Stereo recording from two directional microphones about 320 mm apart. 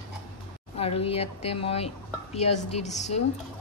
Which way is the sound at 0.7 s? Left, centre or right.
Centre.